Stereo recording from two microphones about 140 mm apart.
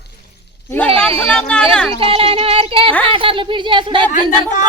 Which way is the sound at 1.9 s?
40° right (ahead or behind).